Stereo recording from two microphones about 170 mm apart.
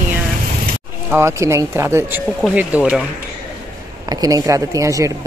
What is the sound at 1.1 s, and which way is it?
Speech, 15° right (ahead or behind).